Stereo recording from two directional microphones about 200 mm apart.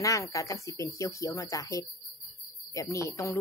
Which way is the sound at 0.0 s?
15° left (ahead or behind).